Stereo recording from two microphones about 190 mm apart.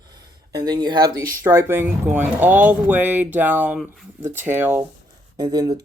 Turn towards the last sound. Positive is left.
turn(degrees=-20)  # may be behind; listen again after turning